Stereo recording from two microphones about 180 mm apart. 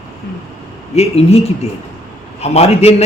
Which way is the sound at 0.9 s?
35° left (ahead or behind).